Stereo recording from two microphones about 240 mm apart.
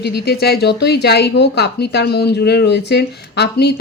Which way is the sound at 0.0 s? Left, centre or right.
Left.